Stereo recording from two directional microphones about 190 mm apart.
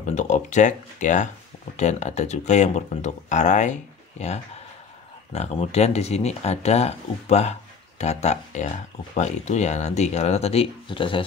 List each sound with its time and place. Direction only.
0.0 s speech: 40° left (ahead or behind)
5.3 s speech: 35° left (ahead or behind)